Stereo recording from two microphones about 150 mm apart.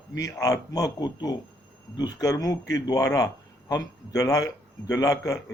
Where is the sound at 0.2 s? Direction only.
25° left (ahead or behind).